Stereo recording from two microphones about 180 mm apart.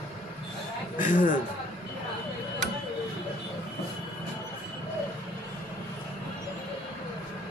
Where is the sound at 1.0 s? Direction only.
45° left (ahead or behind).